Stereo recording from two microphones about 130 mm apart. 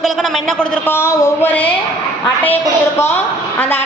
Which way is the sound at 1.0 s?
20° left (ahead or behind).